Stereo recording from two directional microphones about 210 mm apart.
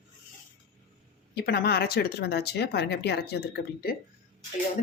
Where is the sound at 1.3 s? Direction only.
50° left (ahead or behind).